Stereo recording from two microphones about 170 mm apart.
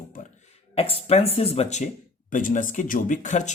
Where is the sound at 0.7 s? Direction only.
35° left (ahead or behind).